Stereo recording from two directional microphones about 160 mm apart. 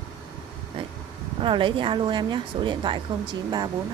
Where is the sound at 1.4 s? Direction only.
30° right (ahead or behind).